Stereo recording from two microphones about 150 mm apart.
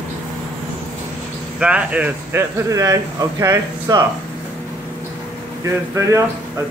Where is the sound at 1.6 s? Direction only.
10° right (ahead or behind).